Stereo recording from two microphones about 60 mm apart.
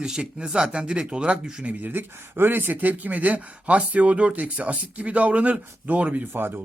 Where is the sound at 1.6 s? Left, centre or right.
Right.